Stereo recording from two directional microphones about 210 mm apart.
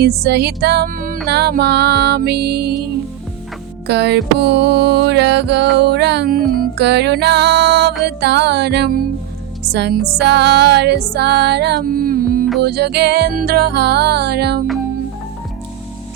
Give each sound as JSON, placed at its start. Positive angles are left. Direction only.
{"t": 0.0, "sound": "music", "side_deg": -50}
{"t": 3.8, "sound": "music", "side_deg": -55}